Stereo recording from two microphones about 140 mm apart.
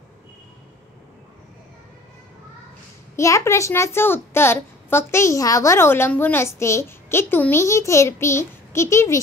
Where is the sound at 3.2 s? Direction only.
20° left (ahead or behind).